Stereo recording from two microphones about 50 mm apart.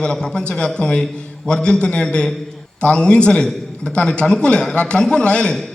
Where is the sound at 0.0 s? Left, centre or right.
Centre.